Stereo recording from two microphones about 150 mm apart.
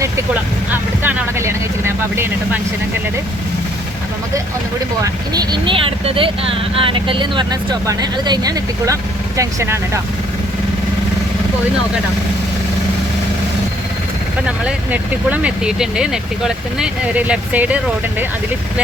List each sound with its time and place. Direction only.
0.7 s vehicle: 15° right (ahead or behind)
5.0 s speech: 25° right (ahead or behind)
14.9 s speech: 10° right (ahead or behind)